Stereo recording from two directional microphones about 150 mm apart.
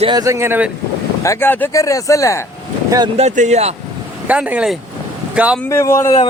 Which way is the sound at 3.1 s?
50° right (ahead or behind).